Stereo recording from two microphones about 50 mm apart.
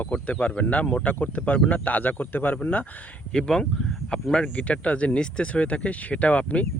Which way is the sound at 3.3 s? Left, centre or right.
Centre.